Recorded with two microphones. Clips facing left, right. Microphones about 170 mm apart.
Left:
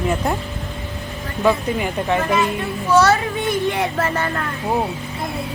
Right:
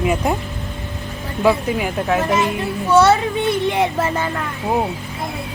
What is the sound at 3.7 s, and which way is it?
Speech, 20° right (ahead or behind).